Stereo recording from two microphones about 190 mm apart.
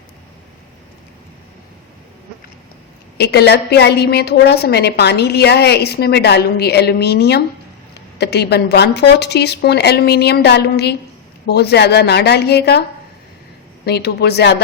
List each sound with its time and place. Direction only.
3.2 s a woman's voice: 60° left (ahead or behind)
13.8 s a woman's voice: 60° left (ahead or behind)